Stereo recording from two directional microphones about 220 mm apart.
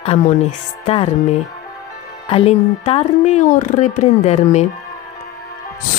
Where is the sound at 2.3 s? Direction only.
25° left (ahead or behind).